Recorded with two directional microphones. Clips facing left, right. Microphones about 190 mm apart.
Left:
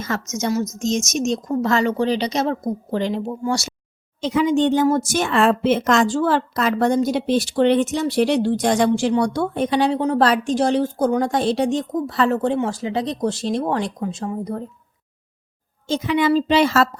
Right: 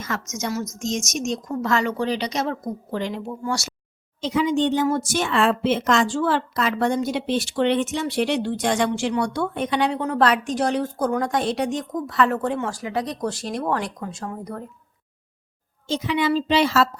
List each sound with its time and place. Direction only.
0.3 s speech: 25° left (ahead or behind)
4.2 s a woman's voice: 50° left (ahead or behind); by 14.7 s 20° left (ahead or behind)
15.9 s a woman's voice: 50° left (ahead or behind)